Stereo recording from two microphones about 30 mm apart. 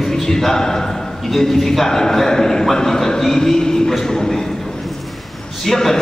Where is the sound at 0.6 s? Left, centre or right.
Centre.